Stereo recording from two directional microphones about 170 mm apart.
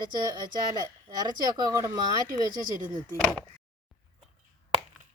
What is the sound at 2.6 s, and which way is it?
Speech, 50° right (ahead or behind).